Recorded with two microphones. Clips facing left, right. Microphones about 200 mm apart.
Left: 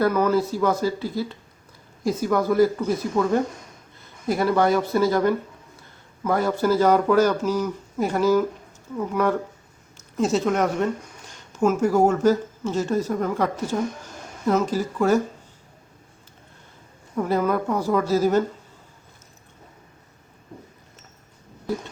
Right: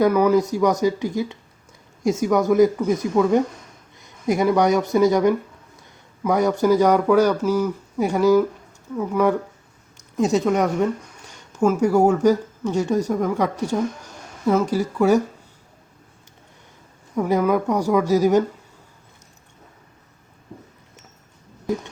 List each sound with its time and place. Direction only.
0.0 s speech: 15° right (ahead or behind)
11.8 s speech: 10° right (ahead or behind)
17.2 s speech: 10° right (ahead or behind)